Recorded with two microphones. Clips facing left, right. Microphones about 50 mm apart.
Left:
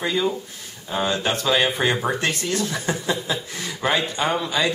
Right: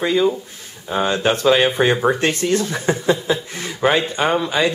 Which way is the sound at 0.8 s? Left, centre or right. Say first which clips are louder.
Right 5 dB; right.